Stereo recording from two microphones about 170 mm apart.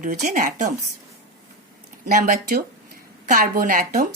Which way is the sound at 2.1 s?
60° right (ahead or behind).